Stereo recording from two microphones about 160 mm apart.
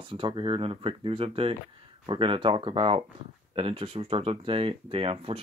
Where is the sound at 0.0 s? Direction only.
30° right (ahead or behind).